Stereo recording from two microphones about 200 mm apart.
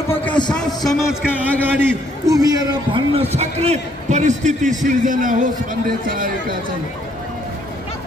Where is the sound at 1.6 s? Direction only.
10° right (ahead or behind); by 6.5 s 45° right (ahead or behind).